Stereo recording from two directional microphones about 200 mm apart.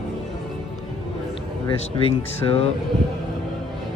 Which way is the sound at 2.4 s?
20° left (ahead or behind).